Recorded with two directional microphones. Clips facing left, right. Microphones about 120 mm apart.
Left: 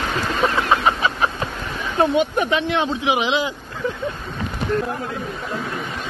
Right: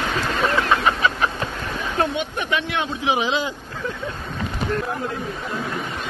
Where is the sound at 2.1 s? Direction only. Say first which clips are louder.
Left 6 dB; 40° left (ahead or behind).